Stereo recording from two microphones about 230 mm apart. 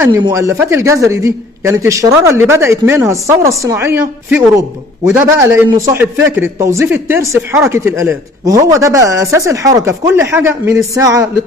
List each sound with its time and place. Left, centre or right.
0.0 s a man's voice: centre